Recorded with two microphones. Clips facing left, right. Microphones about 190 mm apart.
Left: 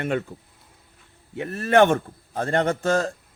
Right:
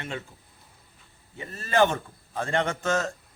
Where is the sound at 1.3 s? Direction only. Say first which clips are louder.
Left 8 dB; 70° left (ahead or behind).